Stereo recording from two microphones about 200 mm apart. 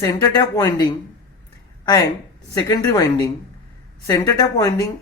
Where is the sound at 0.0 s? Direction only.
20° left (ahead or behind).